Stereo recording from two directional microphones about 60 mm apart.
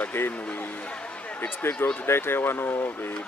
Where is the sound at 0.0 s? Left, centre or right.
Left.